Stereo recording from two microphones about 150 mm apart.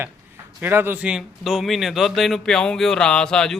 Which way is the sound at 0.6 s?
15° right (ahead or behind).